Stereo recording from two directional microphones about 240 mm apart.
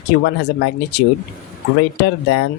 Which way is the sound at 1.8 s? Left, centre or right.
Left.